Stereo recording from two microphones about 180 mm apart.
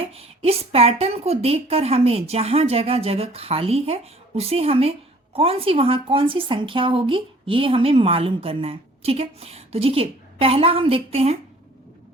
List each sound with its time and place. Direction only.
0.1 s a woman's voice: 35° right (ahead or behind)